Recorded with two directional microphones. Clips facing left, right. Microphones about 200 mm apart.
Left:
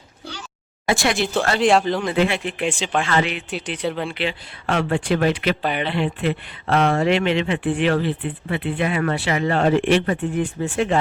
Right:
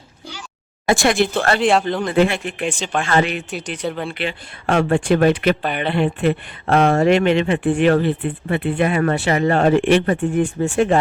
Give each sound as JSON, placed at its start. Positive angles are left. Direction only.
{"t": 0.9, "sound": "speech", "side_deg": -50}
{"t": 1.5, "sound": "speech", "side_deg": 0}
{"t": 2.1, "sound": "speech", "side_deg": -45}
{"t": 3.8, "sound": "speech", "side_deg": 0}
{"t": 4.1, "sound": "speech", "side_deg": -50}